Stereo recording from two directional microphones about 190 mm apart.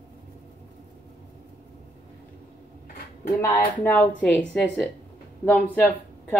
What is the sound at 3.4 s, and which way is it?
A woman's voice, 10° left (ahead or behind).